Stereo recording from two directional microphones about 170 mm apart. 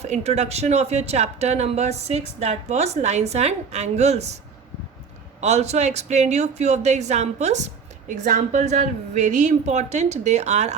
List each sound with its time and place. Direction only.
0.0 s speech: 40° right (ahead or behind)
5.4 s speech: 40° right (ahead or behind)